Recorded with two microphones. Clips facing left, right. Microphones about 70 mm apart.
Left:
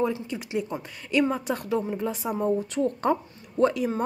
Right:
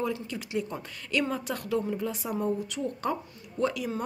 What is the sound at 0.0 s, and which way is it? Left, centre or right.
Speech, left.